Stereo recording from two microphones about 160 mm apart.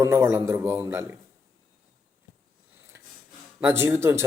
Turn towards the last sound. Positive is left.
turn(degrees=-15)  # may be behind; listen again after turning